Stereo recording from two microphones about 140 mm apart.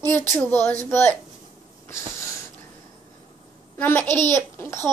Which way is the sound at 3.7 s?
15° left (ahead or behind).